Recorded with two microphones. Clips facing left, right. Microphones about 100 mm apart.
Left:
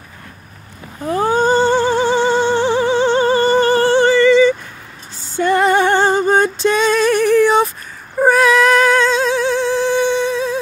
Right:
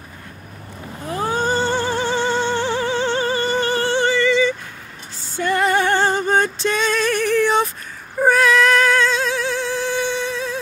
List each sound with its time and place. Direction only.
1.3 s music: 25° left (ahead or behind)
5.3 s a sound: 25° left (ahead or behind); by 7.7 s 10° left (ahead or behind)
8.2 s singing: 15° left (ahead or behind)